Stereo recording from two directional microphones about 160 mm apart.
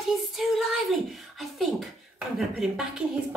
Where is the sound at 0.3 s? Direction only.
Centre (ahead or behind).